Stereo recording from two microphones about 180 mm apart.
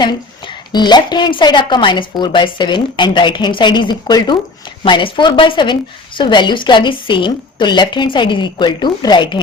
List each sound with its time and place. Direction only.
0.0 s a woman's voice: 25° left (ahead or behind)